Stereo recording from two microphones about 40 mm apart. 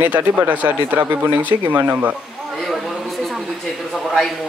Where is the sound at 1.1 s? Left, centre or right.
Right.